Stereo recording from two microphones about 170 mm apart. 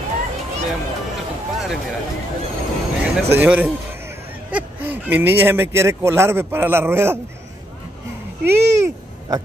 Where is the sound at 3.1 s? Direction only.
10° right (ahead or behind).